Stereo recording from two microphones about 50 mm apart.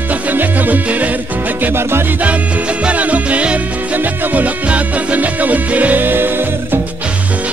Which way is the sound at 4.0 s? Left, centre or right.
Right.